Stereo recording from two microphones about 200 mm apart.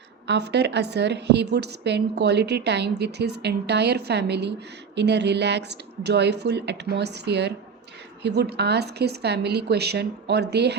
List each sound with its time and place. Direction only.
0.3 s a woman's voice: 60° right (ahead or behind)